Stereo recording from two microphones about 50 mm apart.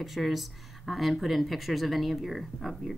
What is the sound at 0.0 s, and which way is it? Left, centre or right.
Speech, centre.